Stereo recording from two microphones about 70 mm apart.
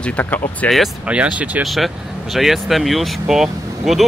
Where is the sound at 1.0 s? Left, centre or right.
Centre.